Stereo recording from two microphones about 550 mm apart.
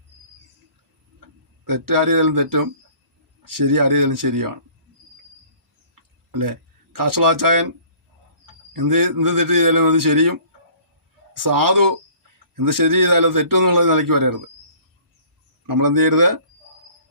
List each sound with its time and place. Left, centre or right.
1.6 s a man's voice: right
5.9 s a sound: right
8.7 s a man's voice: right
15.6 s a man's voice: right